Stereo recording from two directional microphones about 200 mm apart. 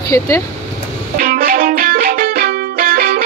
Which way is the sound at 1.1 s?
50° right (ahead or behind).